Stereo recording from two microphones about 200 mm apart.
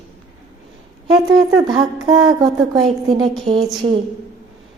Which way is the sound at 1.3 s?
20° right (ahead or behind).